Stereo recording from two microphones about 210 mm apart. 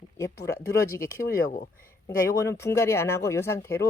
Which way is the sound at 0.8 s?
15° left (ahead or behind).